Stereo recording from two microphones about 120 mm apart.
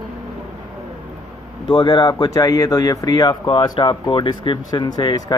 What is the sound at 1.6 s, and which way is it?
Speech, 40° left (ahead or behind).